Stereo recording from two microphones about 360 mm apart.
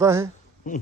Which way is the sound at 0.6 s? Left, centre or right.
Centre.